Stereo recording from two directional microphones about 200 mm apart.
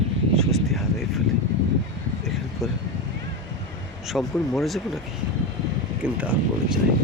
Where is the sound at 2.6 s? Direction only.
Centre (ahead or behind).